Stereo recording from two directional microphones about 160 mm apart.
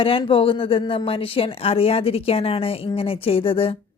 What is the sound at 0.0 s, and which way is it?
A woman's voice, 35° left (ahead or behind).